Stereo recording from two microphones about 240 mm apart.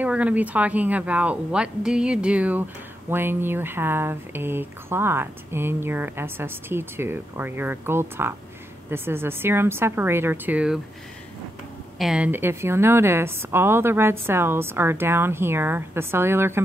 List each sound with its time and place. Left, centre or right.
0.0 s speech: centre
12.0 s speech: centre